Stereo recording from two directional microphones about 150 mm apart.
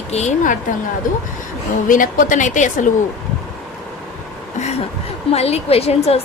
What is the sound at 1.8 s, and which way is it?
A woman's voice, 65° left (ahead or behind).